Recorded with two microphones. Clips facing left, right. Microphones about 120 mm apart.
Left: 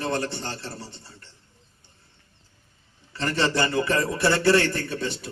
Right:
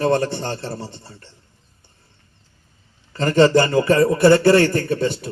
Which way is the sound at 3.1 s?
45° right (ahead or behind).